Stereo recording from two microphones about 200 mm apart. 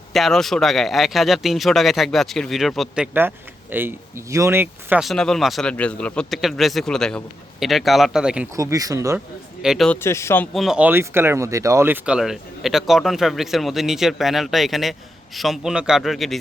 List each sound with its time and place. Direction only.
0.1 s speech: centre (ahead or behind)
8.5 s speech: 15° right (ahead or behind)
9.6 s speech: centre (ahead or behind)